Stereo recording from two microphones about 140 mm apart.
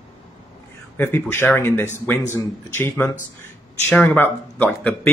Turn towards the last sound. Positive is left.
turn(degrees=10)  # may be behind; listen again after turning